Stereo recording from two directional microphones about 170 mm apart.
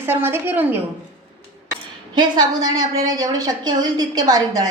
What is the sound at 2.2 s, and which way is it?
A woman's voice, 25° right (ahead or behind).